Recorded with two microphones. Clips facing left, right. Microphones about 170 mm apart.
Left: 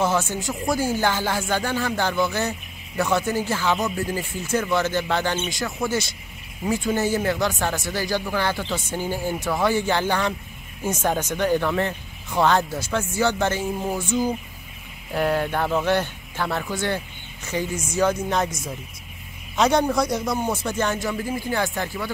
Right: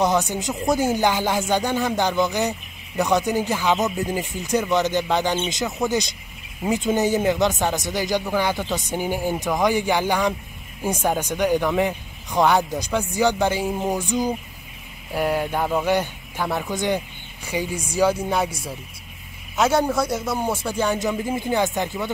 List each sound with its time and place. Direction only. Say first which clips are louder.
0.0 s speech: right 2 dB; 15° right (ahead or behind)